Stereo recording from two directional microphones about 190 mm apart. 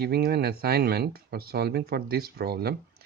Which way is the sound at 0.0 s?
55° right (ahead or behind).